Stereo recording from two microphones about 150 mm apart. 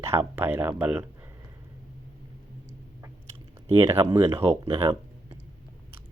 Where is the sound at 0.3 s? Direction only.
15° right (ahead or behind).